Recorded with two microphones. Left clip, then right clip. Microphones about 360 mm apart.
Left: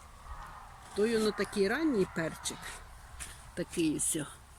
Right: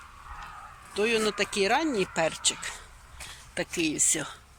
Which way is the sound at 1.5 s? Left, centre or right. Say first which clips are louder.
Right 5 dB; right.